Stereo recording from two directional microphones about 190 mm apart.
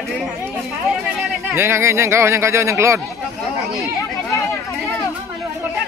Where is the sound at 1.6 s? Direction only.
15° right (ahead or behind).